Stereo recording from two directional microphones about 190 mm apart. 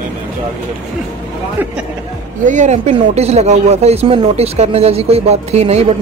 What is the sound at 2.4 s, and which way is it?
Speech, 40° right (ahead or behind).